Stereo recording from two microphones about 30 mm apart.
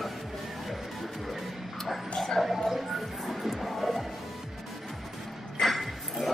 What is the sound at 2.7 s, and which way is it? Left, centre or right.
Music, centre.